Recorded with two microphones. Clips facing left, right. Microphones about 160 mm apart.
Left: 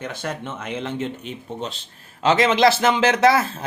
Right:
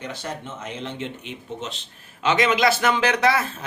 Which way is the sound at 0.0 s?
55° left (ahead or behind).